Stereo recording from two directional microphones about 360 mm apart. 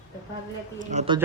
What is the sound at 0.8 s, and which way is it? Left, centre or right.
Speech, centre.